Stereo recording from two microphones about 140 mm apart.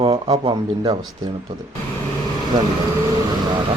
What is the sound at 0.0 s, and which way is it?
Speech, 35° right (ahead or behind).